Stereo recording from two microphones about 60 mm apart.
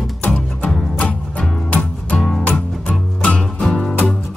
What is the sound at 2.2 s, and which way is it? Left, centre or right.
Music, centre.